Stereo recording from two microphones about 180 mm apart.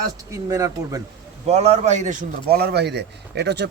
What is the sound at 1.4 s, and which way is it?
Speech, 35° right (ahead or behind).